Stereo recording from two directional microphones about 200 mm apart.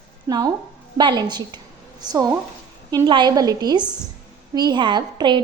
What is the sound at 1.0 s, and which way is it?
A woman's voice, 20° right (ahead or behind).